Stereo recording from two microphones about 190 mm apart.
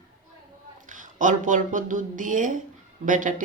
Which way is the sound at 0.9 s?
40° right (ahead or behind).